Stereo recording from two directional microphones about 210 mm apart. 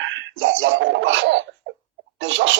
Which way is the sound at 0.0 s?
60° right (ahead or behind).